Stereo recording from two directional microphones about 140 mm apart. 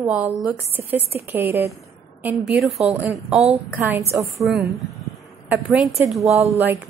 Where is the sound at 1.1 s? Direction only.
15° right (ahead or behind).